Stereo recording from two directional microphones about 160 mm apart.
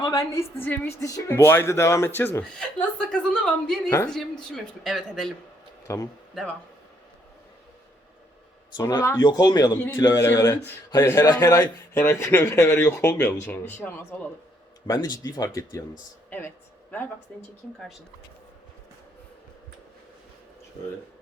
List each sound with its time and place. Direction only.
0.0 s a man's voice: 20° left (ahead or behind)
3.8 s speech: 20° left (ahead or behind)
4.1 s speech: centre (ahead or behind)
5.9 s speech: 20° left (ahead or behind)
8.7 s a man's voice: 25° left (ahead or behind)
9.2 s speech: 25° left (ahead or behind)
9.7 s a man's voice: 10° left (ahead or behind)
14.8 s speech: 25° left (ahead or behind)
17.3 s a man's voice: 5° left (ahead or behind)